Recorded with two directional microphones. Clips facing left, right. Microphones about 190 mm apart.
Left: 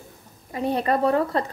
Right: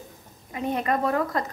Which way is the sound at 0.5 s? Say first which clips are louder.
Left 3 dB; 35° left (ahead or behind).